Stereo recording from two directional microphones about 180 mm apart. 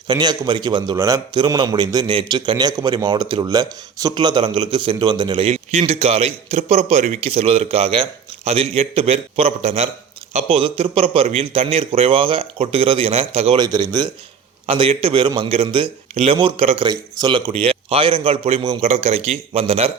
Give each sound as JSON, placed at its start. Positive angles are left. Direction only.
{"t": 0.1, "sound": "a man's voice", "side_deg": -25}
{"t": 13.6, "sound": "a man's voice", "side_deg": -25}